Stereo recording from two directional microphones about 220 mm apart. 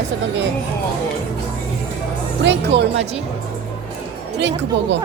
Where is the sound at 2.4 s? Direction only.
50° right (ahead or behind).